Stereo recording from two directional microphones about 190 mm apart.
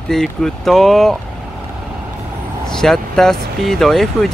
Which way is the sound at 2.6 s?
5° left (ahead or behind).